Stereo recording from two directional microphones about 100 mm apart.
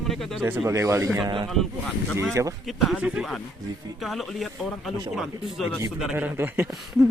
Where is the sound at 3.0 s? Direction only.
5° right (ahead or behind).